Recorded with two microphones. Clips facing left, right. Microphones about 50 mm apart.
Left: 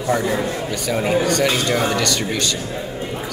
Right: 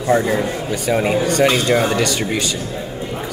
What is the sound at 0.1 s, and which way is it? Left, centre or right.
Speech, right.